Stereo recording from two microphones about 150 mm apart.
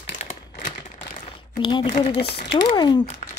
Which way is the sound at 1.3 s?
35° left (ahead or behind).